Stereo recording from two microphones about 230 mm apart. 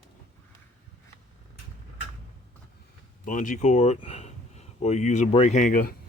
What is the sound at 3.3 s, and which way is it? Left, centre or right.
Speech, left.